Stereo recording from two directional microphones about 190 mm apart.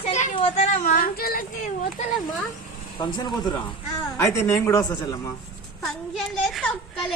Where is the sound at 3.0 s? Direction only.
25° left (ahead or behind).